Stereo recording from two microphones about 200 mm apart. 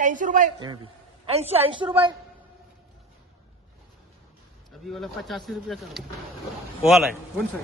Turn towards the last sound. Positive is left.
turn(degrees=0)  # may be behind; listen again after turning